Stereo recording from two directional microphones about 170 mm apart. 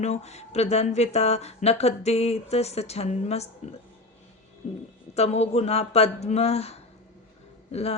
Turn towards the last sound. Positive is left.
turn(degrees=40)  # may be behind; listen again after turning